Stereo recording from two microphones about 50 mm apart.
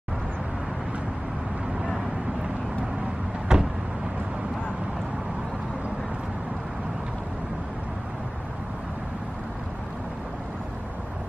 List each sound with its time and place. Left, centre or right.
3.5 s vehicle: centre